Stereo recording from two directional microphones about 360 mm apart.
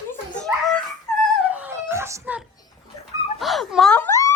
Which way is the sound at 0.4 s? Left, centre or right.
Centre.